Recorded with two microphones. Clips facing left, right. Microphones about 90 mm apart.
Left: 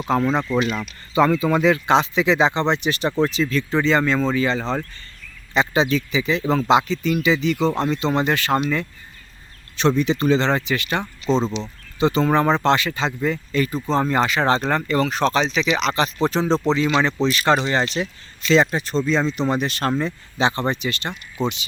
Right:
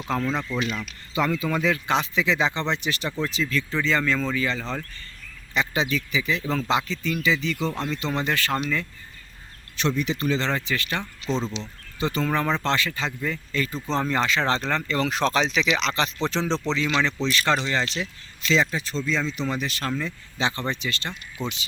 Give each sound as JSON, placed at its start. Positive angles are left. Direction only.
{"t": 0.1, "sound": "speech", "side_deg": 25}
{"t": 0.5, "sound": "speech", "side_deg": 55}
{"t": 1.1, "sound": "speech", "side_deg": 35}
{"t": 9.7, "sound": "speech", "side_deg": 30}
{"t": 13.7, "sound": "speech", "side_deg": 5}
{"t": 16.6, "sound": "speech", "side_deg": 45}
{"t": 16.8, "sound": "speech", "side_deg": 15}
{"t": 17.2, "sound": "speech", "side_deg": 50}
{"t": 17.9, "sound": "speech", "side_deg": 60}
{"t": 19.9, "sound": "speech", "side_deg": 35}
{"t": 20.4, "sound": "speech", "side_deg": 20}